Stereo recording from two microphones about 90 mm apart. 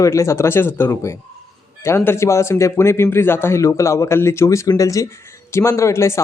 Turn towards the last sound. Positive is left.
turn(degrees=30)  # may be behind; listen again after turning